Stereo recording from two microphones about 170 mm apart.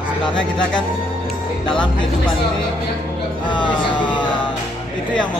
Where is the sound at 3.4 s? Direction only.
25° left (ahead or behind).